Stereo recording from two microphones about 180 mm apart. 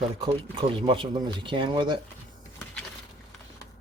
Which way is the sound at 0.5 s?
25° right (ahead or behind).